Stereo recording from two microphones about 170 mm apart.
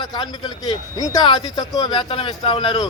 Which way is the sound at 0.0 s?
25° left (ahead or behind).